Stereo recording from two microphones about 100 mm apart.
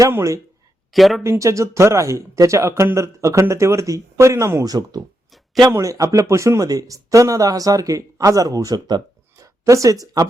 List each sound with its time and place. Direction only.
0.1 s speech: 25° right (ahead or behind)
0.9 s speech: centre (ahead or behind)
1.2 s speech: 30° right (ahead or behind)